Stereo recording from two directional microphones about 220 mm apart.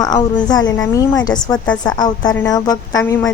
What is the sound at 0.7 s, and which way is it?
A woman's voice, 15° left (ahead or behind).